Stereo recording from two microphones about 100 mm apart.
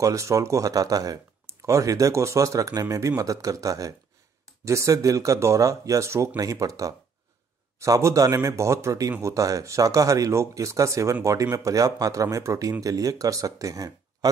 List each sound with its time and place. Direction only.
0.0 s speech: 30° right (ahead or behind)